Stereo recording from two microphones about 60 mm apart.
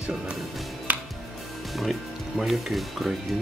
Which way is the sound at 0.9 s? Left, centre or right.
Right.